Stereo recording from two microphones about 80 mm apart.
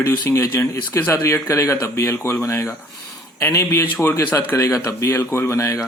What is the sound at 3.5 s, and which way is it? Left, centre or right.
Speech, left.